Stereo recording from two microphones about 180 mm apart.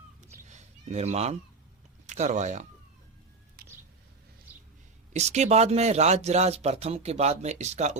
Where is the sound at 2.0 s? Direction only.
40° right (ahead or behind).